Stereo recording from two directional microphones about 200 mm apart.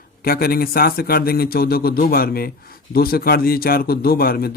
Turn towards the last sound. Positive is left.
turn(degrees=50)  # may be behind; listen again after turning